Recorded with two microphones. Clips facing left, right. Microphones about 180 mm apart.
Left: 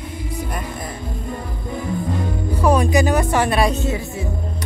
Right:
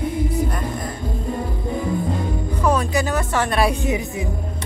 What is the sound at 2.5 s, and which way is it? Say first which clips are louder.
Music: left 4 dB; 10° left (ahead or behind).